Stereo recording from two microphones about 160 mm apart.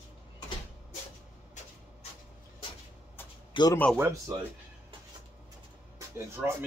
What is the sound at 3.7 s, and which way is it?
Speech, 10° left (ahead or behind).